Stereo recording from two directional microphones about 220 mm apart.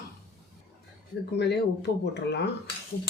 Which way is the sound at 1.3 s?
50° left (ahead or behind).